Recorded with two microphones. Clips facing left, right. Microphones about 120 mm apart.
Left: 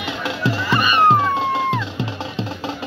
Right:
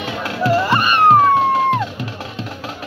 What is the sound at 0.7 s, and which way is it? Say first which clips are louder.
Music: right 2 dB; 50° right (ahead or behind).